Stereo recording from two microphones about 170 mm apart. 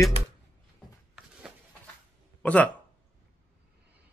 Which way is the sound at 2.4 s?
10° left (ahead or behind).